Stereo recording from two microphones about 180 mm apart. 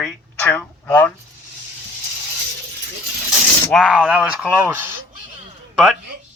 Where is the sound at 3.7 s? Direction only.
Centre (ahead or behind).